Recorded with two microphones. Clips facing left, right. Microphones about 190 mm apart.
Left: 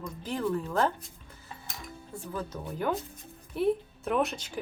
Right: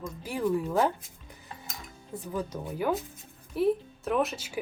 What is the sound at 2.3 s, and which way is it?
Speech, 10° right (ahead or behind).